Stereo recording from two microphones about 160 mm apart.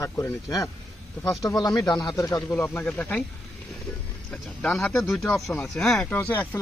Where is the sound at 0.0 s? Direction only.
20° left (ahead or behind).